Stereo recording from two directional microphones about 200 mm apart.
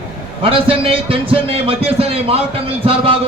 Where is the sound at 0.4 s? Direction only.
25° right (ahead or behind).